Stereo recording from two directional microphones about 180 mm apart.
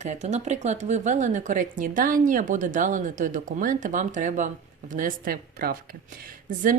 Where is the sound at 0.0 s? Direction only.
40° right (ahead or behind).